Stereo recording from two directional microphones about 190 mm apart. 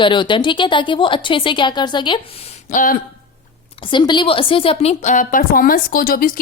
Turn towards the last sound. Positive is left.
turn(degrees=50)  # may be behind; listen again after turning